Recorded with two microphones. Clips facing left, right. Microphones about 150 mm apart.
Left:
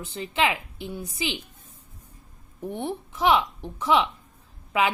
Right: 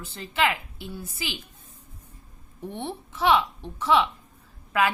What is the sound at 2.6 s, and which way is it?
A woman's voice, 10° left (ahead or behind).